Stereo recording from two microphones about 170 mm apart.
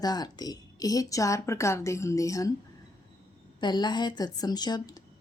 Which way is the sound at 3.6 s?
25° left (ahead or behind).